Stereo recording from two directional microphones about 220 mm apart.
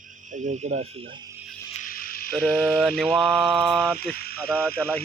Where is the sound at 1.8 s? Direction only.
40° left (ahead or behind).